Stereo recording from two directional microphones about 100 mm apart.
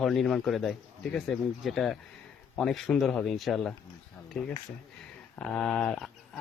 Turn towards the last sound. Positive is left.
turn(degrees=10)  # may be behind; listen again after turning